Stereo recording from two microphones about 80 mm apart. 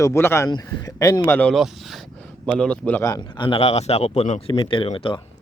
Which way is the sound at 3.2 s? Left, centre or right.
Left.